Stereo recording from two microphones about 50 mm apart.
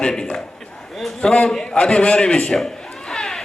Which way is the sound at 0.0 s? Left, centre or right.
Centre.